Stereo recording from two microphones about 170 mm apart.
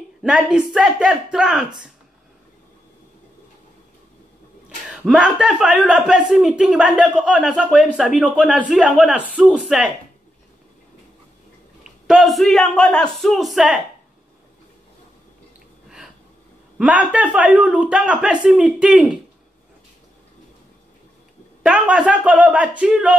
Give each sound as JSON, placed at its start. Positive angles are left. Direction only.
{"t": 0.2, "sound": "speech", "side_deg": -5}
{"t": 4.6, "sound": "speech", "side_deg": -5}
{"t": 11.8, "sound": "speech", "side_deg": 0}
{"t": 16.7, "sound": "speech", "side_deg": -5}
{"t": 21.6, "sound": "speech", "side_deg": -5}